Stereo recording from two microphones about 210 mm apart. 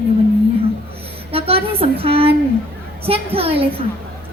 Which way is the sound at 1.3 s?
25° right (ahead or behind).